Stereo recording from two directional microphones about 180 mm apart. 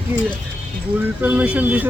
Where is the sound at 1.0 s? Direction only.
10° right (ahead or behind).